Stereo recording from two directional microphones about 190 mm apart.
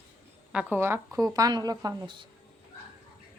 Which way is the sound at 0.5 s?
10° right (ahead or behind).